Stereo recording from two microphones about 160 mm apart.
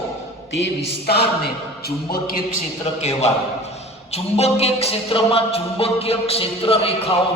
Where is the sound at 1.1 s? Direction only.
90° left.